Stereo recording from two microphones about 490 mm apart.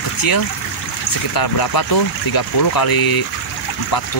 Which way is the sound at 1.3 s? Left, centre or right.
Left.